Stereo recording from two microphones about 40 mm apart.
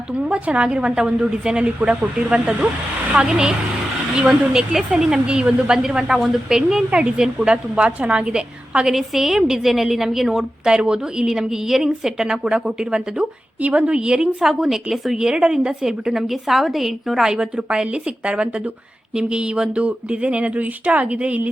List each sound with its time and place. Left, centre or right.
0.2 s speech: right
3.1 s a woman's voice: centre
6.1 s a woman's voice: centre
7.4 s speech: right
8.9 s a woman's voice: centre
10.7 s a woman's voice: right
13.1 s speech: right
14.4 s a woman's voice: centre
15.3 s a woman's voice: right
17.3 s speech: right
19.1 s speech: right
20.6 s speech: right